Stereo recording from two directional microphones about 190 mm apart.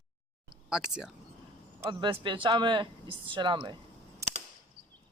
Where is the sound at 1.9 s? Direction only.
25° right (ahead or behind).